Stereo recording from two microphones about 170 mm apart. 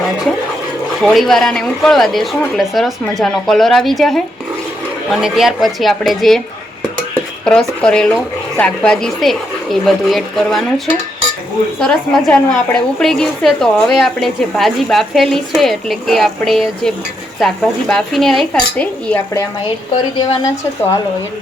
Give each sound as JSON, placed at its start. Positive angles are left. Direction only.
{"t": 1.0, "sound": "a woman's voice", "side_deg": 0}
{"t": 7.4, "sound": "a woman's voice", "side_deg": 5}
{"t": 11.8, "sound": "a woman's voice", "side_deg": 5}
{"t": 20.1, "sound": "a woman's voice", "side_deg": 25}